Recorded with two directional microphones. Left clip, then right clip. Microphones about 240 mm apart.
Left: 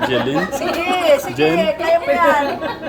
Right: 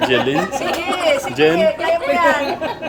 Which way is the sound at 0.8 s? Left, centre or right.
Centre.